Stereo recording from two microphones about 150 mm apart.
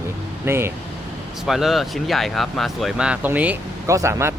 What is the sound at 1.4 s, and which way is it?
Speech, centre (ahead or behind).